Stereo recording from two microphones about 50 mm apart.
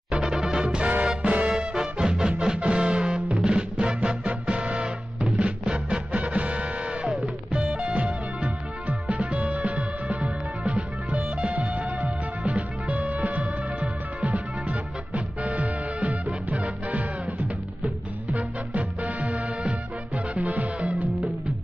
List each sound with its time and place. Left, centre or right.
0.1 s music: centre
1.5 s music: centre
18.3 s music: right